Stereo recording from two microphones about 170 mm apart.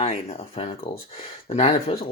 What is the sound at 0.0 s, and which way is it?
Speech, 35° left (ahead or behind).